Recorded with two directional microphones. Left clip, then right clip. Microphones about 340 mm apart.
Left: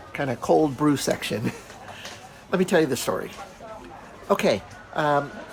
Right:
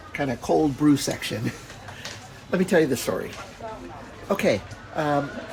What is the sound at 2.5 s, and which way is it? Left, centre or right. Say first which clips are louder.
Speech: even; centre.